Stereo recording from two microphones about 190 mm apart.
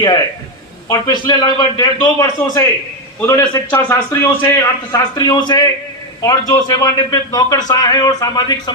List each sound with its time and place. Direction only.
0.9 s a man's voice: 20° left (ahead or behind)